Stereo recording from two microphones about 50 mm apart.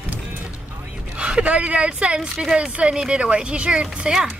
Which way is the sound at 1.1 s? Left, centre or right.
Centre.